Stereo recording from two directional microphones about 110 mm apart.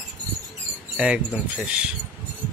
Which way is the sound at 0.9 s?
10° right (ahead or behind).